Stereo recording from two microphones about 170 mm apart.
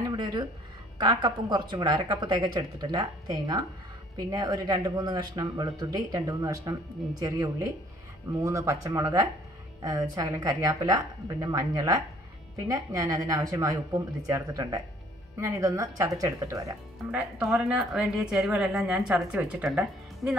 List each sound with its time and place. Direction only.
0.1 s a sound: 25° right (ahead or behind)
0.9 s speech: 25° right (ahead or behind)
17.1 s a woman's voice: centre (ahead or behind)